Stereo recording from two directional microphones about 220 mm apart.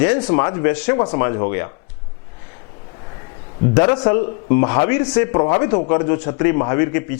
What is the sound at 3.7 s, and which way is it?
A man's voice, 20° left (ahead or behind).